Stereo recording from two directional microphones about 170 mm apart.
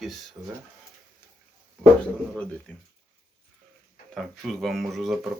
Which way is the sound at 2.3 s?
5° left (ahead or behind).